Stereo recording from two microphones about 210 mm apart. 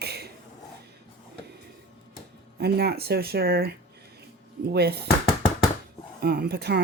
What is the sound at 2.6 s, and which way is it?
Speech, 50° right (ahead or behind).